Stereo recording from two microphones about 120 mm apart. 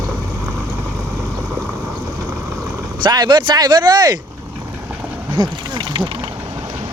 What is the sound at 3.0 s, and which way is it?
Speech, 35° right (ahead or behind).